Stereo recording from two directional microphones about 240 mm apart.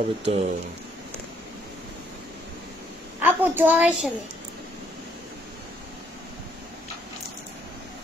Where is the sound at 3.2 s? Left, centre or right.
Centre.